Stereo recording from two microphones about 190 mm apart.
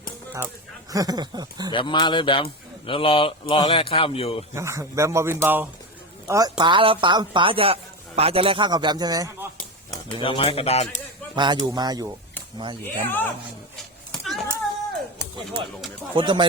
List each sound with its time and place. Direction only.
0.3 s speech: 15° right (ahead or behind)
1.7 s a man's voice: 25° left (ahead or behind)
4.5 s a man's voice: 15° right (ahead or behind)
10.1 s speech: 30° left (ahead or behind)
11.3 s a woman's voice: 25° right (ahead or behind)
12.8 s speech: 10° left (ahead or behind)
14.1 s a sound: centre (ahead or behind)
16.1 s a woman's voice: 25° right (ahead or behind)